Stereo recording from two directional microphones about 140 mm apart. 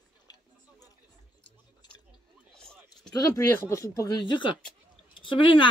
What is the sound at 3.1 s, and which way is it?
Speech, 25° left (ahead or behind).